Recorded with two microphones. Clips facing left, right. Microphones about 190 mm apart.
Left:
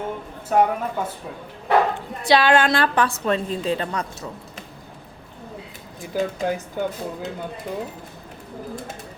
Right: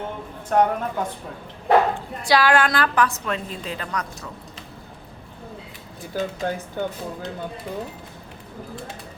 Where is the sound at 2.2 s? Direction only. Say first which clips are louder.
Left 2 dB; 25° left (ahead or behind).